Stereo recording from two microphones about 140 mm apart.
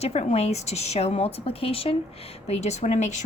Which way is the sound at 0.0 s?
50° left (ahead or behind).